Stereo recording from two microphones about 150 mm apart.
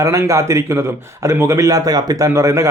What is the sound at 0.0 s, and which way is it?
A man's voice, 20° right (ahead or behind).